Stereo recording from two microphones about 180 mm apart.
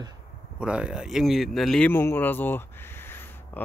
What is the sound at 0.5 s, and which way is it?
Speech, 5° right (ahead or behind).